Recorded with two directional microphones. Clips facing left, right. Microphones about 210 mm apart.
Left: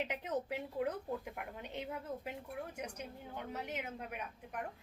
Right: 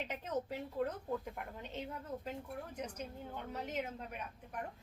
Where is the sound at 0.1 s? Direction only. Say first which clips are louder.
Left 1 dB; 15° left (ahead or behind).